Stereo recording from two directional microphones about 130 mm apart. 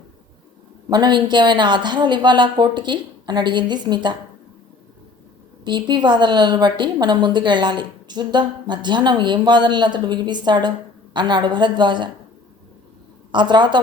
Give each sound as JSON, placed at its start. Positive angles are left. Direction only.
{"t": 0.9, "sound": "a woman's voice", "side_deg": -35}
{"t": 5.6, "sound": "a woman's voice", "side_deg": -35}
{"t": 13.3, "sound": "a woman's voice", "side_deg": -35}